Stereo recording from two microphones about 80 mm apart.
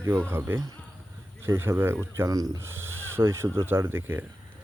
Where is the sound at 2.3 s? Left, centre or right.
Right.